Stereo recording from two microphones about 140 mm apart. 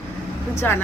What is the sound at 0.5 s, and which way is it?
Speech, 15° left (ahead or behind).